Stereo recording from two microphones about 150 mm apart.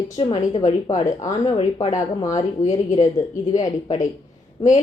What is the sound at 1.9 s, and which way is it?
Speech, 20° left (ahead or behind).